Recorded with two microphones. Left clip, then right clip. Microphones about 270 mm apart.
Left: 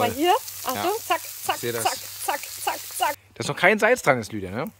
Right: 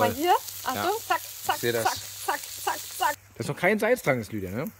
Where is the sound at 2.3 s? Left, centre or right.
Left.